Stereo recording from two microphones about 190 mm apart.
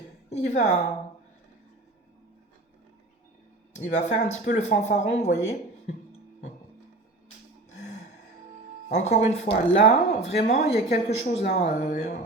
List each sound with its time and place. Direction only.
0.3 s a woman's voice: 40° left (ahead or behind)
3.7 s speech: 40° left (ahead or behind)
8.9 s speech: 35° left (ahead or behind)